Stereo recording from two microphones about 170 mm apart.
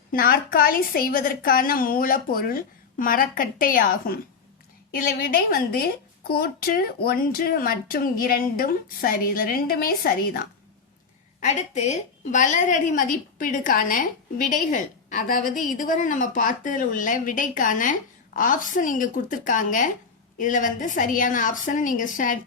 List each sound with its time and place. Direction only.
0.1 s a woman's voice: 60° left (ahead or behind)
11.3 s a woman's voice: 45° left (ahead or behind)